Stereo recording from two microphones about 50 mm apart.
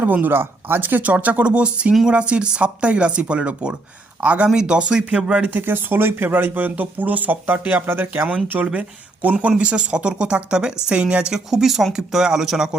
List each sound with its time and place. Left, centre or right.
0.0 s speech: right
5.5 s speech: right
7.9 s speech: right; by 11.3 s centre
11.3 s speech: centre